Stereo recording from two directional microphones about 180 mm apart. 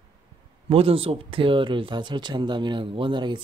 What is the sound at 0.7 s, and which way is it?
Speech, 30° right (ahead or behind).